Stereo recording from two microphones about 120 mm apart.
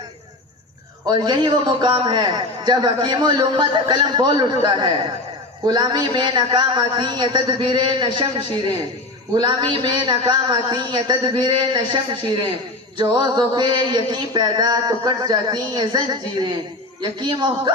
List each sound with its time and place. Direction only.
1.0 s a man's voice: 35° right (ahead or behind)
17.0 s a man's voice: 40° right (ahead or behind)